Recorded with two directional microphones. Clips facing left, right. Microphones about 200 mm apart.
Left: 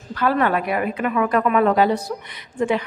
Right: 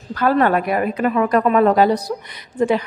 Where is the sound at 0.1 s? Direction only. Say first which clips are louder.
Right 3 dB; 45° right (ahead or behind).